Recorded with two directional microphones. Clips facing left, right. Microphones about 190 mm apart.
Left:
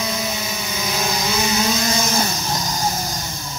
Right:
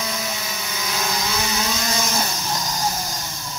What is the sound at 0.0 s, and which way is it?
Vehicle, 20° left (ahead or behind).